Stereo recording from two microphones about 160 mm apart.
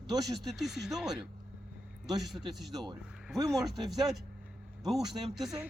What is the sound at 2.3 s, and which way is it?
Speech, centre (ahead or behind).